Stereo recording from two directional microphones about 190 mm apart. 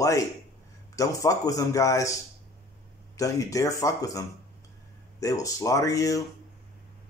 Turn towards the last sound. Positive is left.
turn(degrees=15)  # may be behind; listen again after turning